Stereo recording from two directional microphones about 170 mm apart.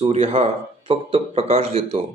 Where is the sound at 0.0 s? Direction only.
35° right (ahead or behind).